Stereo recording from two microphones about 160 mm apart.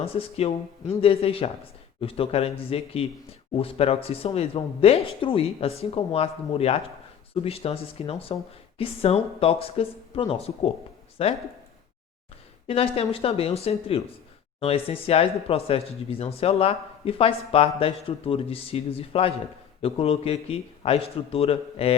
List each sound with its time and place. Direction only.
0.0 s speech: 35° left (ahead or behind)
12.6 s speech: 35° left (ahead or behind)